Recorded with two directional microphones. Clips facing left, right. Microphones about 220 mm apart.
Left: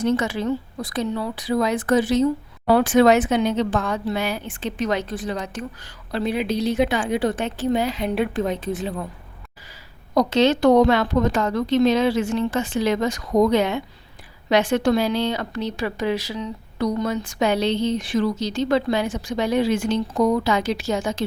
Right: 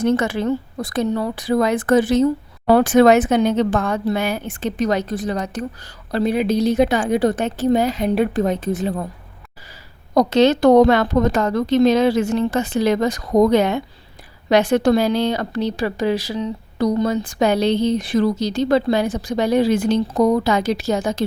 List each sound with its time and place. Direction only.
0.0 s a woman's voice: 50° right (ahead or behind)
10.2 s a woman's voice: 40° right (ahead or behind)